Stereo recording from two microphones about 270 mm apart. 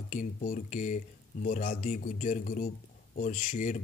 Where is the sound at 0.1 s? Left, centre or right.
Left.